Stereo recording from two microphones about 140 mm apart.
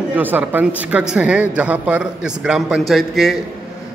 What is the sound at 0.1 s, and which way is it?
A man's voice, 10° right (ahead or behind).